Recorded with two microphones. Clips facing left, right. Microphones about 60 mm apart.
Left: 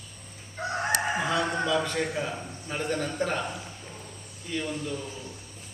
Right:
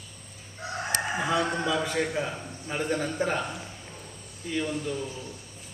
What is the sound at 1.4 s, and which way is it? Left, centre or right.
A man's voice, centre.